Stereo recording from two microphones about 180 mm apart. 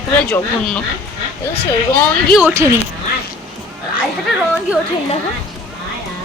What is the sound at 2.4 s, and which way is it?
Speech, 15° right (ahead or behind).